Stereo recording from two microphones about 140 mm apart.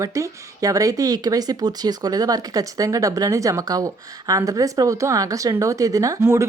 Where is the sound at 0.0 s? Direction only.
25° right (ahead or behind).